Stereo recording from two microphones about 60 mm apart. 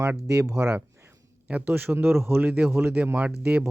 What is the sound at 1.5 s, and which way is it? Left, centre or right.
A man's voice, right.